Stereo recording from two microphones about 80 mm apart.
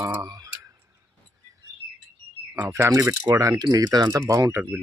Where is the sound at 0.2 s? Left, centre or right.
Right.